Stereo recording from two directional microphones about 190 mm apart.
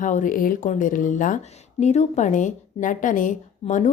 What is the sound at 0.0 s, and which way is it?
Speech, 40° left (ahead or behind).